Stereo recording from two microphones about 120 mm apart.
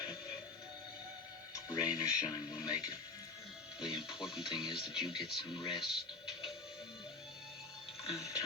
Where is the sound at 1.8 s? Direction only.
30° left (ahead or behind).